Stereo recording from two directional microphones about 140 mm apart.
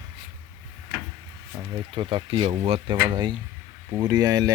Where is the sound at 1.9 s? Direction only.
35° right (ahead or behind).